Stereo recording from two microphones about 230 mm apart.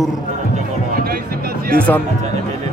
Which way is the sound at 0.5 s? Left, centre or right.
Right.